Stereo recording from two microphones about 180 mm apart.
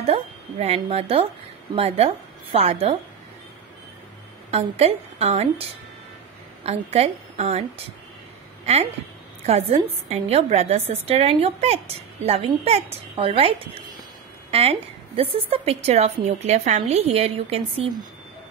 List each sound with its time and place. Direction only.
0.0 s a woman's voice: 35° right (ahead or behind)
4.5 s a woman's voice: 35° right (ahead or behind)
9.5 s a woman's voice: 35° right (ahead or behind)